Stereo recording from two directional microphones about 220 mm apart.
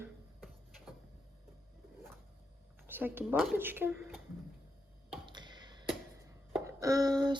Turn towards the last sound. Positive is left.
turn(degrees=-20)  # may be behind; listen again after turning